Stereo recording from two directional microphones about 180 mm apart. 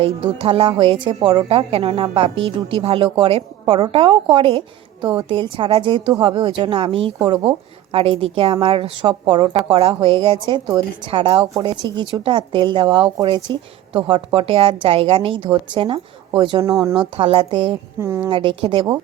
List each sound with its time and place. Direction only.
0.0 s a woman's voice: 30° right (ahead or behind)
18.0 s a woman's voice: 15° right (ahead or behind)
18.3 s speech: 30° right (ahead or behind)